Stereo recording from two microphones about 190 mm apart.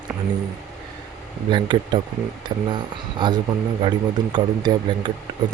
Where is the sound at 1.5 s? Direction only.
25° right (ahead or behind).